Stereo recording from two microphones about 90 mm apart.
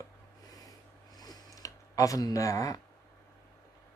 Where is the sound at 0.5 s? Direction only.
45° left (ahead or behind).